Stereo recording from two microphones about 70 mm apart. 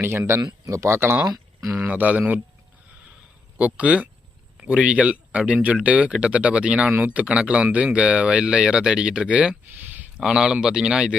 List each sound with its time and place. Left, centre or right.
0.0 s speech: right
1.9 s speech: right
3.6 s speech: centre
9.6 s a sound: right
10.2 s speech: centre